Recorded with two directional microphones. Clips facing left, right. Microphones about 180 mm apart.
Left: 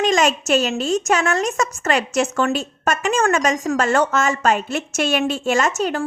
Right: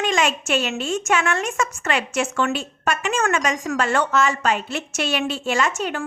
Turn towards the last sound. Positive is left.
turn(degrees=40)  # may be behind; listen again after turning